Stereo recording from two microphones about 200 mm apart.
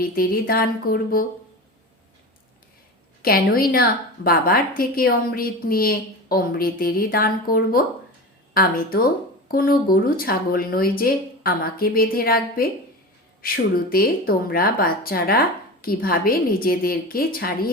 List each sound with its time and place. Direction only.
0.0 s a woman's voice: 50° left (ahead or behind)
3.2 s a woman's voice: 50° left (ahead or behind)